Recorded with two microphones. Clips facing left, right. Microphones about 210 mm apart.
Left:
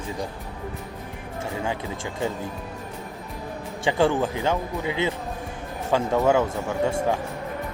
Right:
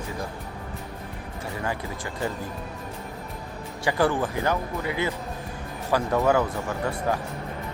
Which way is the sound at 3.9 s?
25° left (ahead or behind).